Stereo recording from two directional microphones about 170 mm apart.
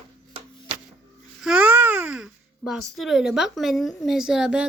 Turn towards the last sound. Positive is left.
turn(degrees=-5)  # may be behind; listen again after turning